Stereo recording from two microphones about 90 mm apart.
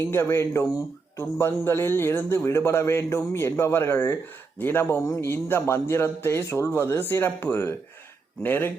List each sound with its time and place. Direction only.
0.0 s a man's voice: 30° left (ahead or behind)